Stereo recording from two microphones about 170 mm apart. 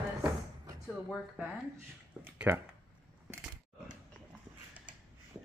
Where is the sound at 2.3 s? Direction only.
10° right (ahead or behind).